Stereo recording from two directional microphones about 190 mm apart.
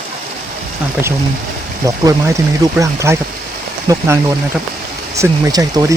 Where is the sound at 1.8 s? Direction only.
15° right (ahead or behind).